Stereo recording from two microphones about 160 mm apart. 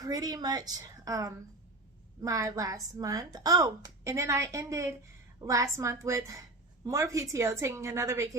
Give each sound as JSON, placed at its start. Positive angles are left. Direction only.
{"t": 0.0, "sound": "a woman's voice", "side_deg": -25}